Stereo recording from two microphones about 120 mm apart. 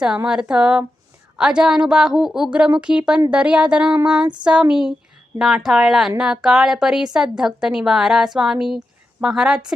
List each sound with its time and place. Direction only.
0.3 s a woman's voice: 10° right (ahead or behind)